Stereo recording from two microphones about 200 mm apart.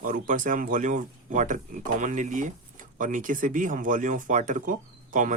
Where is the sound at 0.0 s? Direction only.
40° right (ahead or behind).